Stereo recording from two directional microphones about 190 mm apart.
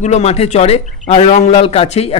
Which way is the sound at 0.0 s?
35° left (ahead or behind).